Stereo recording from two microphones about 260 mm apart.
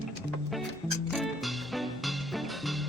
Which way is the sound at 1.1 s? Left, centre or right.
Centre.